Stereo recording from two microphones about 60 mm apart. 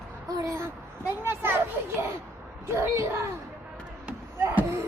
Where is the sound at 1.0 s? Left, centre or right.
Right.